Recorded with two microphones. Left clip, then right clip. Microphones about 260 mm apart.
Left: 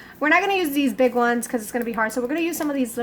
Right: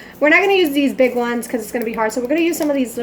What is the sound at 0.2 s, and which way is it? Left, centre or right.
A woman's voice, left.